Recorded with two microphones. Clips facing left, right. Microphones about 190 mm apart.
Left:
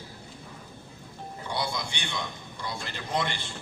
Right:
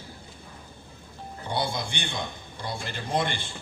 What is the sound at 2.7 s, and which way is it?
Speech, 55° right (ahead or behind).